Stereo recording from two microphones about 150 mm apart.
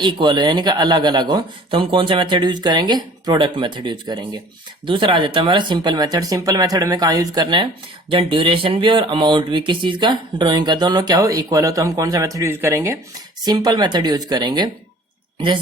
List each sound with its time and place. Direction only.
0.0 s speech: 30° right (ahead or behind)